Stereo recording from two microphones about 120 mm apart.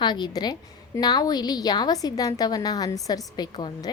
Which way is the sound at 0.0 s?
35° left (ahead or behind).